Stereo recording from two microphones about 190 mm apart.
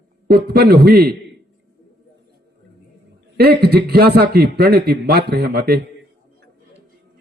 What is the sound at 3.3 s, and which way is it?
A man's voice, 55° right (ahead or behind).